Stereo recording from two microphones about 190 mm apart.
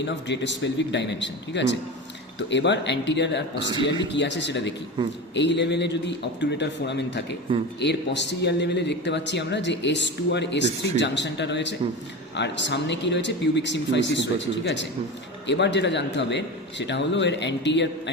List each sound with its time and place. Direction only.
0.0 s speech: 70° left (ahead or behind)
5.0 s speech: 25° right (ahead or behind)
5.3 s speech: 70° left (ahead or behind)